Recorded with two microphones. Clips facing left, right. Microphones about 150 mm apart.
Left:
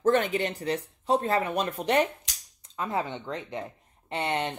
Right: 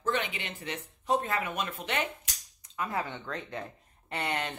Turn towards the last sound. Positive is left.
turn(degrees=25)  # may be behind; listen again after turning